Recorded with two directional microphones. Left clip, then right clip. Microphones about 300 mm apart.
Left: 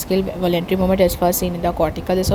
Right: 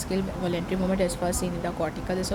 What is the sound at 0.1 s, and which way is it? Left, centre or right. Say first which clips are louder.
A woman's voice: left 11 dB; left.